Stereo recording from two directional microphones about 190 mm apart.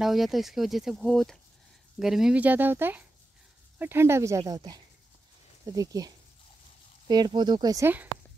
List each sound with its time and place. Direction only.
0.0 s speech: centre (ahead or behind)